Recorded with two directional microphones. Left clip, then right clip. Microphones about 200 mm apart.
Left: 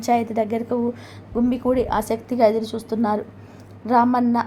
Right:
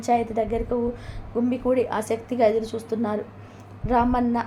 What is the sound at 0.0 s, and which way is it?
A woman's voice, 20° left (ahead or behind).